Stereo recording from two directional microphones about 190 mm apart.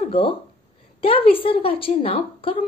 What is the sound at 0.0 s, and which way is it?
A woman's voice, 30° left (ahead or behind).